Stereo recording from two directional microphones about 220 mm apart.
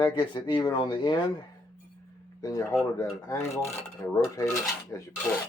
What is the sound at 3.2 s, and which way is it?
Speech, 10° left (ahead or behind).